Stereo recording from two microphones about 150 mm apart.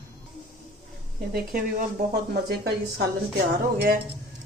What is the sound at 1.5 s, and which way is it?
Speech, 85° right.